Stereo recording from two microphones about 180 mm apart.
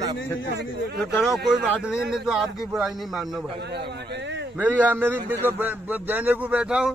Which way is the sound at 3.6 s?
70° right (ahead or behind).